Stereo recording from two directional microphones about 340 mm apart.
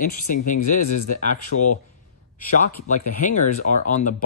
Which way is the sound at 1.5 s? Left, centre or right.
Left.